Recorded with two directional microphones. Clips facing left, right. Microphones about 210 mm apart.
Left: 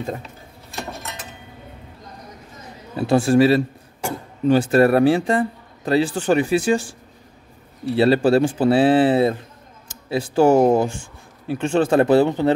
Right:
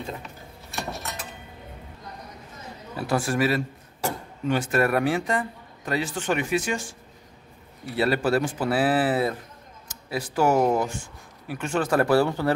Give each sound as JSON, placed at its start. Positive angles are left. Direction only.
{"t": 3.0, "sound": "a man's voice", "side_deg": 25}